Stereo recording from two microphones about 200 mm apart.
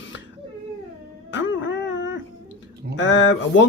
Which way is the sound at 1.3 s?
70° left (ahead or behind).